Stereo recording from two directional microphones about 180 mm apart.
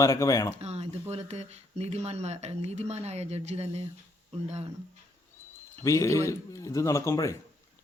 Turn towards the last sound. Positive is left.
turn(degrees=15)  # may be behind; listen again after turning